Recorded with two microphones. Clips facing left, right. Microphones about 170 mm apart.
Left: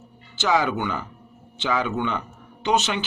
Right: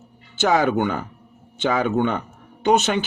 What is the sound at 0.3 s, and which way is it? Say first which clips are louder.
Speech: right 4 dB; 50° right (ahead or behind).